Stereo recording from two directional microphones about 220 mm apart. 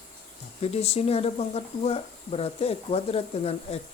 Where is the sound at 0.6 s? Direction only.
30° left (ahead or behind).